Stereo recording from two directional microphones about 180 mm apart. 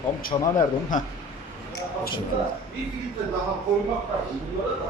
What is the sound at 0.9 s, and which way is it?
Speech, 45° left (ahead or behind).